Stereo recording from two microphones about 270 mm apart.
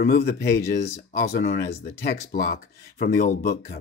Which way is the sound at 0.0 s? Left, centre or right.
Left.